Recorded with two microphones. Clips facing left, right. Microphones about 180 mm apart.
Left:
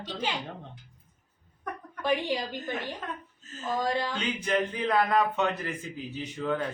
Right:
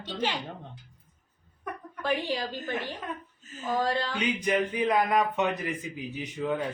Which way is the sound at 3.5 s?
10° right (ahead or behind).